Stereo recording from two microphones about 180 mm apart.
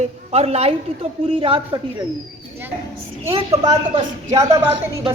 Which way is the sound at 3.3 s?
35° right (ahead or behind).